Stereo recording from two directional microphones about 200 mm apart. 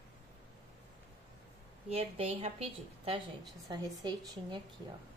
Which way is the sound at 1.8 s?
30° right (ahead or behind).